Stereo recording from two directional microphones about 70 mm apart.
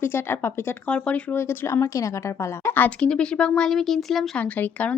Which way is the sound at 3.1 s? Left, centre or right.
Centre.